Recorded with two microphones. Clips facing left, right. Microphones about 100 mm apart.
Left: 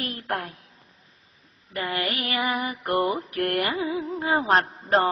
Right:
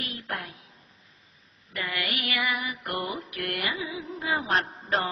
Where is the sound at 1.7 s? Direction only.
35° left (ahead or behind).